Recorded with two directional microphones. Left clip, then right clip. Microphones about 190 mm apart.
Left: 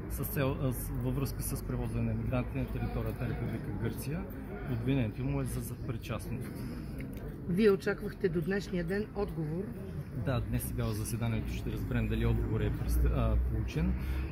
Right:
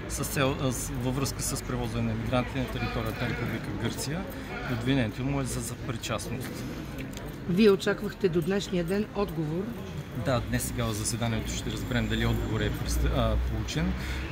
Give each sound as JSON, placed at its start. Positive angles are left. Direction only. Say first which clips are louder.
{"t": 0.4, "sound": "speech", "louder": "right 6 dB", "side_deg": -5}
{"t": 4.8, "sound": "speech", "louder": "right 5 dB", "side_deg": -5}
{"t": 7.5, "sound": "speech", "louder": "right 5 dB", "side_deg": -70}
{"t": 10.2, "sound": "speech", "louder": "right 8 dB", "side_deg": -10}